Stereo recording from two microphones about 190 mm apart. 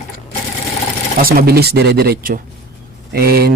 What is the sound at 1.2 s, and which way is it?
Speech, 50° right (ahead or behind).